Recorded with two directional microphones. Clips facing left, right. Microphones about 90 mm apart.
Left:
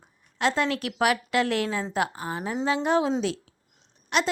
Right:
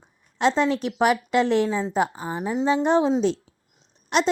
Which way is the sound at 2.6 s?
25° right (ahead or behind).